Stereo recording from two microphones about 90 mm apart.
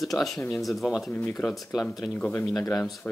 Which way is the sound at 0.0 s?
Centre (ahead or behind).